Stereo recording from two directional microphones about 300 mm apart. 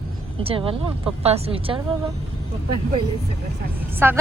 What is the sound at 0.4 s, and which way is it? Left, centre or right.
Speech, centre.